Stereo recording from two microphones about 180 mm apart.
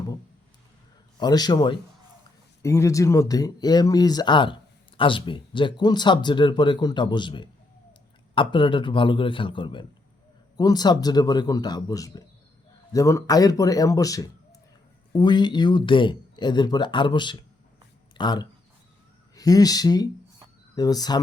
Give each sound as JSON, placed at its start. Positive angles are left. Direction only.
{"t": 1.2, "sound": "speech", "side_deg": 20}